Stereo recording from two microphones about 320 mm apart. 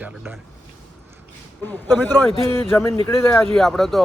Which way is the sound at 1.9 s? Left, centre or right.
Centre.